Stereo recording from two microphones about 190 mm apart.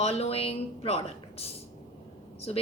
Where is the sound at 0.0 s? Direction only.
35° left (ahead or behind).